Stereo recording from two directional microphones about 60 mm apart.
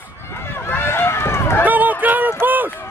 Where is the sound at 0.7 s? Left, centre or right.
Left.